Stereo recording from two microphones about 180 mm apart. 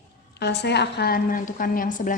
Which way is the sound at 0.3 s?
70° left (ahead or behind).